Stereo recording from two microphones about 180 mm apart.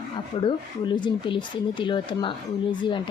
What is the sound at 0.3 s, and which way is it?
A woman's voice, 30° left (ahead or behind).